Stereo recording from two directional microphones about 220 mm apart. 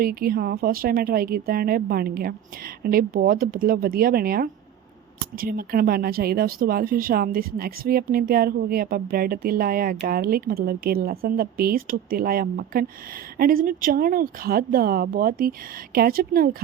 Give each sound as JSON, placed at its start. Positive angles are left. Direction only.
{"t": 0.0, "sound": "speech", "side_deg": -40}